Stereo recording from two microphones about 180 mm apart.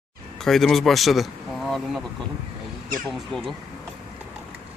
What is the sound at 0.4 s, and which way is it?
Speech, centre (ahead or behind).